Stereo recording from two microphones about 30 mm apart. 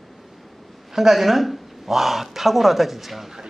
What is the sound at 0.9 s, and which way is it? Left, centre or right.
Speech, centre.